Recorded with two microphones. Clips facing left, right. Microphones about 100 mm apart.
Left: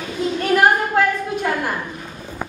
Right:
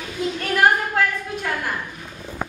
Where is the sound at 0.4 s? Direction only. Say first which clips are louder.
Left 3 dB; 5° left (ahead or behind).